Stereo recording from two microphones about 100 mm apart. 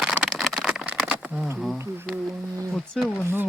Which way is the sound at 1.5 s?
Centre (ahead or behind).